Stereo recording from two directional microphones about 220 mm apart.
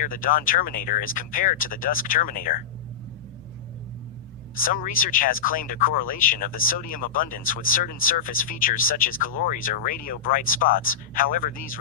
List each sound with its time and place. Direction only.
0.0 s speech: 40° left (ahead or behind)
4.6 s speech: 40° left (ahead or behind)